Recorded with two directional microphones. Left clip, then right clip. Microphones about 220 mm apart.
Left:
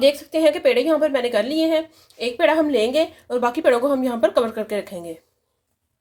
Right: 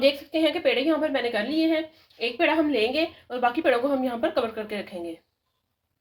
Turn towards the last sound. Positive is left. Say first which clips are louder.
# left 7 dB
turn(degrees=40)  # may be behind; listen again after turning